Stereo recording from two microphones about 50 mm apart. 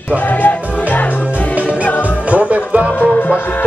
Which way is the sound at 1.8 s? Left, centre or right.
Left.